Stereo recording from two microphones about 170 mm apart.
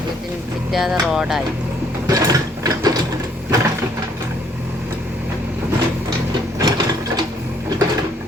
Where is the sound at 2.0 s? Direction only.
20° right (ahead or behind).